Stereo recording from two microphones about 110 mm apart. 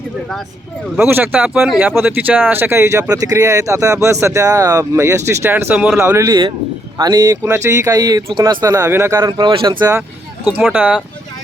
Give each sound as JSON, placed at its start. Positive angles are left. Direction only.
{"t": 1.0, "sound": "speech", "side_deg": -20}
{"t": 6.0, "sound": "speech", "side_deg": -25}
{"t": 7.0, "sound": "speech", "side_deg": -35}
{"t": 8.7, "sound": "speech", "side_deg": -25}
{"t": 9.1, "sound": "speech", "side_deg": -35}
{"t": 9.5, "sound": "speech", "side_deg": -50}
{"t": 10.8, "sound": "speech", "side_deg": -15}